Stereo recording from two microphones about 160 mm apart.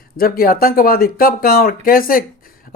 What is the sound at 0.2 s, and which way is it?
Speech, 70° left (ahead or behind).